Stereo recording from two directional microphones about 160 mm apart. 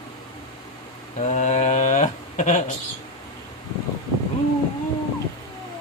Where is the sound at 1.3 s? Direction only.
50° left (ahead or behind).